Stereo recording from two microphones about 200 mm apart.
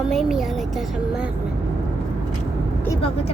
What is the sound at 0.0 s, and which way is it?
A woman's voice, centre (ahead or behind).